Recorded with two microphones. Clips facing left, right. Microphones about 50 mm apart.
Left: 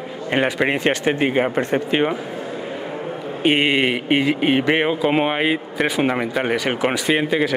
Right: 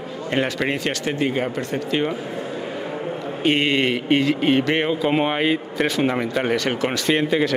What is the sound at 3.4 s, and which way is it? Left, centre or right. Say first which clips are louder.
Speech: left 2 dB; centre.